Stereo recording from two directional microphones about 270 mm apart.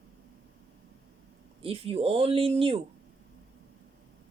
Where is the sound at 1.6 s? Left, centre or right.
Right.